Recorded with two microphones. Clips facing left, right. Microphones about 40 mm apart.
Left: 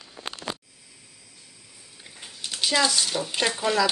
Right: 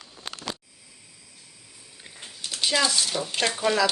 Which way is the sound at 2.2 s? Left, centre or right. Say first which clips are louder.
Even; centre.